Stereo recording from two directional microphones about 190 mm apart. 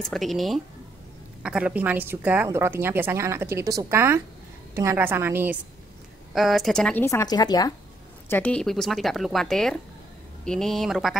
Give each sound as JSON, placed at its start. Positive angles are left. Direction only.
{"t": 0.0, "sound": "a woman's voice", "side_deg": 0}
{"t": 6.3, "sound": "a woman's voice", "side_deg": 0}
{"t": 8.3, "sound": "speech", "side_deg": 5}